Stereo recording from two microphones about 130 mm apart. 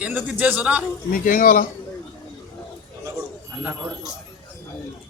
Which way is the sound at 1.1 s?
90° left.